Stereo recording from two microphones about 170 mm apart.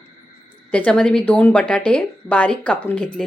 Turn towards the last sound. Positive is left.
turn(degrees=5)  # may be behind; listen again after turning